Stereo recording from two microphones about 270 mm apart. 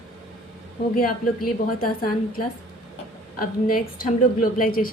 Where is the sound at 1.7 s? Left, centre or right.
Left.